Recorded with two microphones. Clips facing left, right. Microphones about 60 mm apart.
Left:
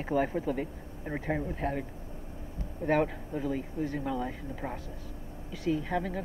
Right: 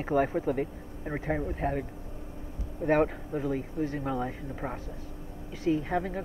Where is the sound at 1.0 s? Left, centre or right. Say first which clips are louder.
Right 1 dB; centre.